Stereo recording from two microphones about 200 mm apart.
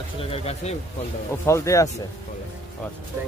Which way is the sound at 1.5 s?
15° left (ahead or behind).